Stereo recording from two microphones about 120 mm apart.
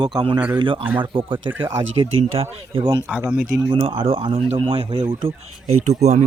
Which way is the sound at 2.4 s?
55° right (ahead or behind).